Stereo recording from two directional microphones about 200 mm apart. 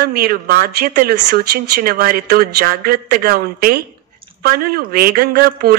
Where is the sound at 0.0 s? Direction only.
50° right (ahead or behind).